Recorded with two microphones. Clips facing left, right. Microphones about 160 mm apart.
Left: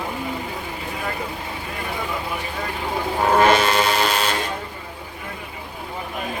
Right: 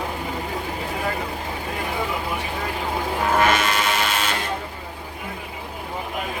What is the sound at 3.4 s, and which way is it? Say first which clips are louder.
Train: left 5 dB; 30° left (ahead or behind).